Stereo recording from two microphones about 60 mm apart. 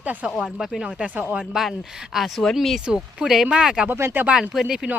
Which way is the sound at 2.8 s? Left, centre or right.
Centre.